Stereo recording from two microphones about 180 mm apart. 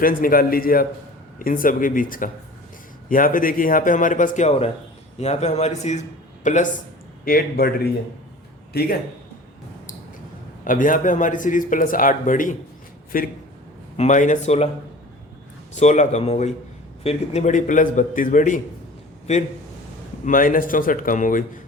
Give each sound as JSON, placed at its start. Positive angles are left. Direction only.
{"t": 0.0, "sound": "a man's voice", "side_deg": 55}
{"t": 7.3, "sound": "speech", "side_deg": 55}
{"t": 8.7, "sound": "speech", "side_deg": 60}
{"t": 10.6, "sound": "a man's voice", "side_deg": 50}
{"t": 13.9, "sound": "speech", "side_deg": 40}
{"t": 15.7, "sound": "a man's voice", "side_deg": 40}